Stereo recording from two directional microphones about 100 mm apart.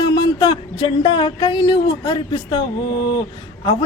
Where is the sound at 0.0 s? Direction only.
50° left (ahead or behind).